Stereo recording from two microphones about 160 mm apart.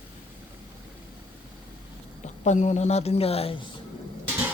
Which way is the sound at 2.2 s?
50° left (ahead or behind).